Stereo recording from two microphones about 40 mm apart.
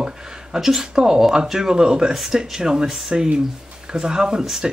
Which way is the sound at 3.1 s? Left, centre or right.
Right.